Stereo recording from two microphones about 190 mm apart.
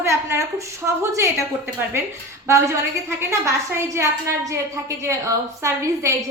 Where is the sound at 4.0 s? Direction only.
15° right (ahead or behind).